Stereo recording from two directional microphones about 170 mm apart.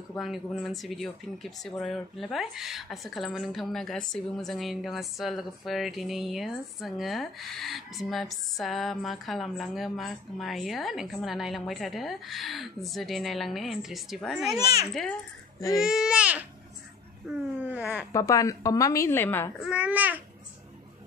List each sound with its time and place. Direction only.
0.2 s speech: centre (ahead or behind)
15.8 s speech: 5° right (ahead or behind)
18.1 s a woman's voice: 20° left (ahead or behind)
19.6 s speech: 5° right (ahead or behind)